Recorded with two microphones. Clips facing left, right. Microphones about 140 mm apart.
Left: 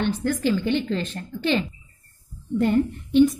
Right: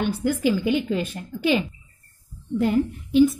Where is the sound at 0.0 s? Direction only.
10° right (ahead or behind).